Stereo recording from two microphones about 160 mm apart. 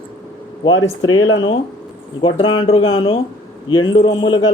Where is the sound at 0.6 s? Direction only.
30° left (ahead or behind).